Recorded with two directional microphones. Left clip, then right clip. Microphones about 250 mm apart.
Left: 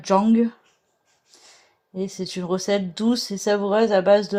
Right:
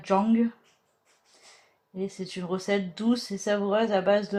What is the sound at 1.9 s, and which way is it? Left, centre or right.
Speech, left.